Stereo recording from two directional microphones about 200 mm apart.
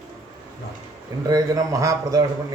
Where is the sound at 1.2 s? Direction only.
15° right (ahead or behind).